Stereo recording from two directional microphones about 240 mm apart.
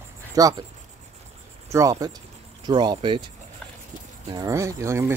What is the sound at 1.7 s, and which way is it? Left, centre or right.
Speech, centre.